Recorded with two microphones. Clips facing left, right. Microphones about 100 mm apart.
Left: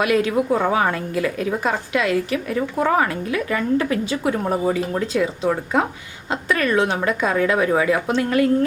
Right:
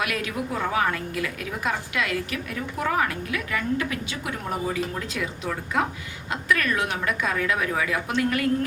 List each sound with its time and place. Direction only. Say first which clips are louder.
0.0 s a woman's voice: left 10 dB; 30° left (ahead or behind)